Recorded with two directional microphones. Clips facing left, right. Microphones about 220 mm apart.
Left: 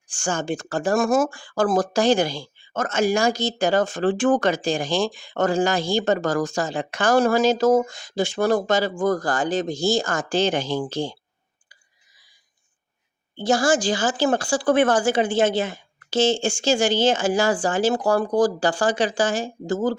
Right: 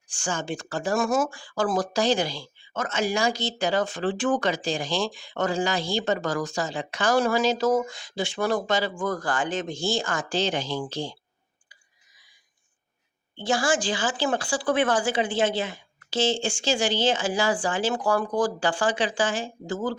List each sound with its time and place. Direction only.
0.1 s speech: 50° left (ahead or behind)
13.3 s speech: 40° left (ahead or behind)